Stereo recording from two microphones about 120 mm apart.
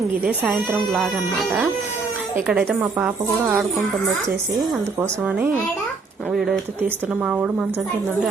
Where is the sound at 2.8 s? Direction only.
10° right (ahead or behind).